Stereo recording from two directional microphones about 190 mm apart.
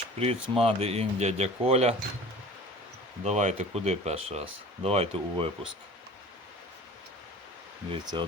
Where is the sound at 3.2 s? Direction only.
35° right (ahead or behind).